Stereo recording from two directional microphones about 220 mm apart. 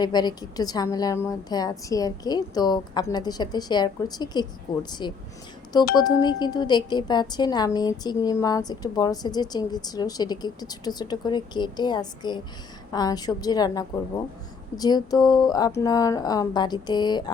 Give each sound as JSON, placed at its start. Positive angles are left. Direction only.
{"t": 0.0, "sound": "a woman's voice", "side_deg": 20}